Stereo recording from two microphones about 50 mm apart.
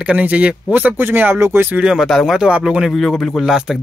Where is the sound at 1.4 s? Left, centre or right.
Right.